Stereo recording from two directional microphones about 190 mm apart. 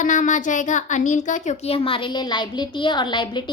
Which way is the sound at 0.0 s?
40° left (ahead or behind).